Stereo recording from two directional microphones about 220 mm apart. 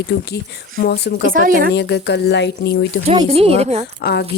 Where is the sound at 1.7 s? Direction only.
50° left (ahead or behind).